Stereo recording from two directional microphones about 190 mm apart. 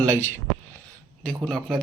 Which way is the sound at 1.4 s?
5° left (ahead or behind).